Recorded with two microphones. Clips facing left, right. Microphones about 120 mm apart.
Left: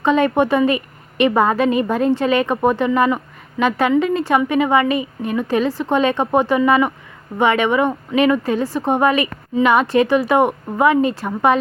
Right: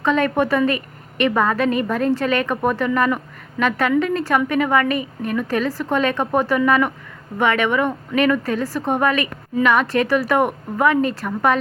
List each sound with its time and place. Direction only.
0.0 s a woman's voice: 30° left (ahead or behind)